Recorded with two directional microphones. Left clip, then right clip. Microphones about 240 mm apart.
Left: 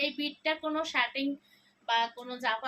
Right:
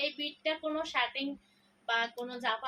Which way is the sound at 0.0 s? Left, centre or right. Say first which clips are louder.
Left 2 dB; left.